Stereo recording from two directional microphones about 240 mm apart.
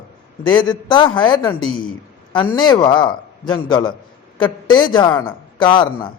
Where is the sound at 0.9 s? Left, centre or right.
Centre.